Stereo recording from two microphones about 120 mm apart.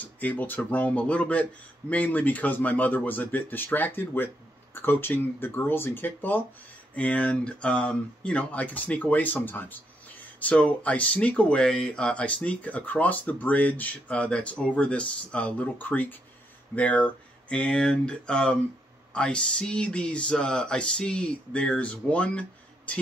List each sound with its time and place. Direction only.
0.0 s speech: 15° left (ahead or behind)